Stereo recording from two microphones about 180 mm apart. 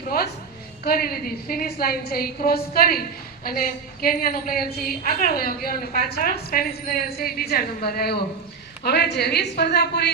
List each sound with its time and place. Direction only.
0.9 s a woman's voice: 55° left (ahead or behind)